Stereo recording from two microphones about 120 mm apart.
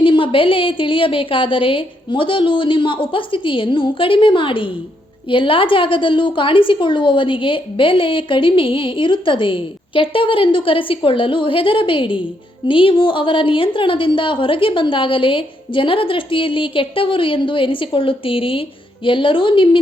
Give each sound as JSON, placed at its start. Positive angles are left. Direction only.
{"t": 0.0, "sound": "a woman's voice", "side_deg": 45}